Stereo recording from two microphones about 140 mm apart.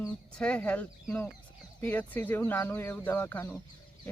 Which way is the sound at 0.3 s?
10° left (ahead or behind).